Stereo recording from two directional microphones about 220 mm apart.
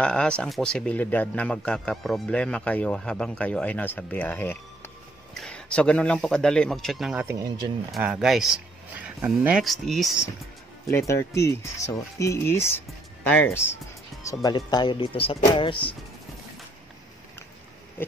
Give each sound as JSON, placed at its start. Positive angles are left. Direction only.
{"t": 0.0, "sound": "speech", "side_deg": 5}
{"t": 7.9, "sound": "speech", "side_deg": -5}
{"t": 10.9, "sound": "speech", "side_deg": 10}